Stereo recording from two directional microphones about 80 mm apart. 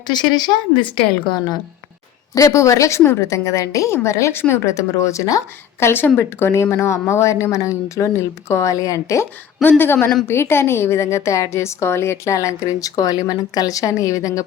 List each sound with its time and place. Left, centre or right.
0.1 s a woman's voice: left
2.3 s a woman's voice: left
5.8 s a woman's voice: left
9.6 s a woman's voice: left